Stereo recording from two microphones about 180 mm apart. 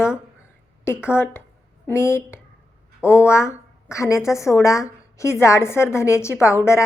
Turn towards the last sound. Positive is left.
turn(degrees=15)  # may be behind; listen again after turning